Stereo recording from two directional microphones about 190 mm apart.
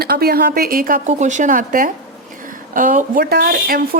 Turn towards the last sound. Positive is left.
turn(degrees=-50)  # may be behind; listen again after turning